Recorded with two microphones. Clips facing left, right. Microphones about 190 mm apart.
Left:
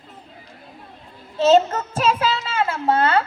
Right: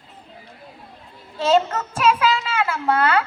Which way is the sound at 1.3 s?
25° left (ahead or behind).